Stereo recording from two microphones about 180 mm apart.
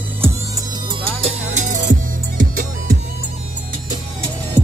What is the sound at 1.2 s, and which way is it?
Music, 40° right (ahead or behind).